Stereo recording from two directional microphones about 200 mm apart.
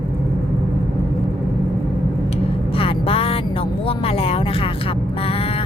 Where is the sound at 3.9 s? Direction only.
30° left (ahead or behind).